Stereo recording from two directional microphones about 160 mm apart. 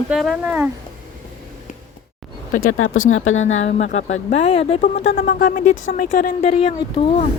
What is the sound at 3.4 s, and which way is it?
Speech, 45° left (ahead or behind).